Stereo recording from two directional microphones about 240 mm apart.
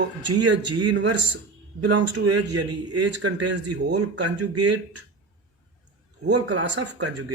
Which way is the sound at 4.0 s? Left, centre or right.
Right.